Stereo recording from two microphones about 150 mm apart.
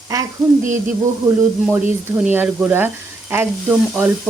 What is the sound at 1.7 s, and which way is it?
Speech, 15° right (ahead or behind).